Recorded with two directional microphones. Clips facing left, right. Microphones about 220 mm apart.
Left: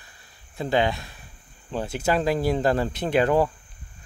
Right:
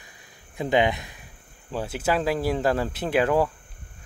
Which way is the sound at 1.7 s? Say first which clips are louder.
Left 1 dB; 5° right (ahead or behind).